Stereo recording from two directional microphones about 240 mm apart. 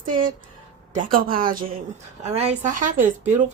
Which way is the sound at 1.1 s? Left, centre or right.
Right.